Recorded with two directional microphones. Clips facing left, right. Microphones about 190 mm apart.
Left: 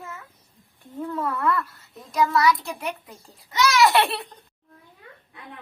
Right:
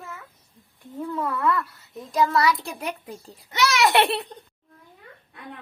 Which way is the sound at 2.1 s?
30° right (ahead or behind).